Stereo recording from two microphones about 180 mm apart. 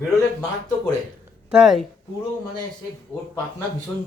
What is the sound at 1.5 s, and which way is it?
Speech, centre (ahead or behind).